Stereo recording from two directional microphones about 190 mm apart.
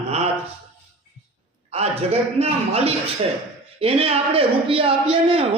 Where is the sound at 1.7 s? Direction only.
35° right (ahead or behind).